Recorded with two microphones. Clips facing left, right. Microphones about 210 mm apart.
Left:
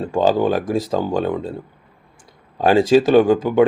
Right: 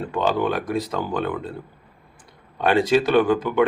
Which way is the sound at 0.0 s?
30° left (ahead or behind).